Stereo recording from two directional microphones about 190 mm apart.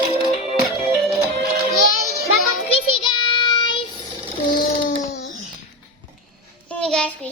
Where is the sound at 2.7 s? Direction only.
25° left (ahead or behind).